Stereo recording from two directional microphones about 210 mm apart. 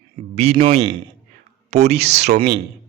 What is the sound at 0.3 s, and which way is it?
Speech, 25° right (ahead or behind).